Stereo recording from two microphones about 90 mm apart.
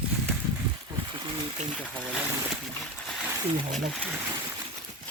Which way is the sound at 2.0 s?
10° right (ahead or behind).